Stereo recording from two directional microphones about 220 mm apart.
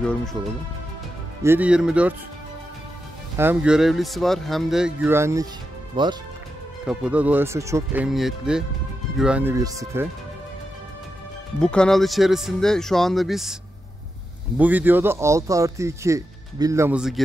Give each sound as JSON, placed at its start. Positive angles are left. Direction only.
{"t": 0.0, "sound": "speech", "side_deg": 5}
{"t": 1.4, "sound": "speech", "side_deg": -10}
{"t": 3.3, "sound": "speech", "side_deg": -5}
{"t": 6.9, "sound": "speech", "side_deg": -5}
{"t": 11.6, "sound": "speech", "side_deg": 5}
{"t": 14.6, "sound": "speech", "side_deg": -10}